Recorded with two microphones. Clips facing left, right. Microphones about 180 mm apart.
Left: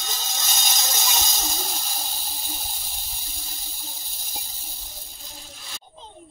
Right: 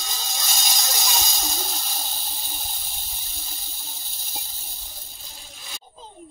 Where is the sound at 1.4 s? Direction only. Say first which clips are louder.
Even; centre (ahead or behind).